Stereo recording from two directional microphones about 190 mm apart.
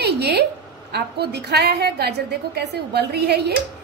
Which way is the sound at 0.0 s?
60° right (ahead or behind).